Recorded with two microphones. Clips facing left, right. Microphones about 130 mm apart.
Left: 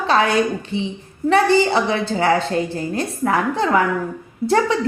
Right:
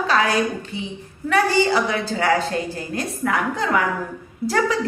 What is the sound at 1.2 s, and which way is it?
A woman's voice, 30° left (ahead or behind).